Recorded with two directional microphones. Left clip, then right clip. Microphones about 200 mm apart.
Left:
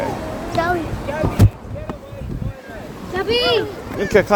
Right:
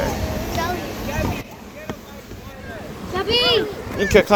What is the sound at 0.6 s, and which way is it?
Speech, 55° left (ahead or behind).